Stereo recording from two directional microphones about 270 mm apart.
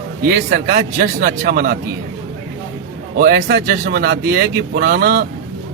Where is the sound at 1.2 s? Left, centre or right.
Right.